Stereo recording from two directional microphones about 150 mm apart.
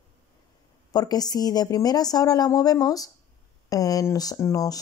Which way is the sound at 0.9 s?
25° left (ahead or behind).